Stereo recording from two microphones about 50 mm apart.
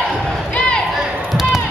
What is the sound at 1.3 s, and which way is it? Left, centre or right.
Basketball bounce, centre.